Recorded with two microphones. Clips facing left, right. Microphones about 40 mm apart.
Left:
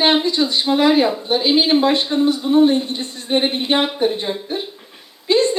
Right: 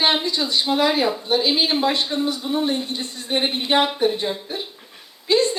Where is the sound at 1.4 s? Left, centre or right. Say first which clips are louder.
Left 7 dB; left.